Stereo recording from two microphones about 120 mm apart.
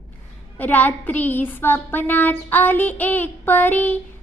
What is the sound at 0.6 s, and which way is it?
Child singing, 15° left (ahead or behind).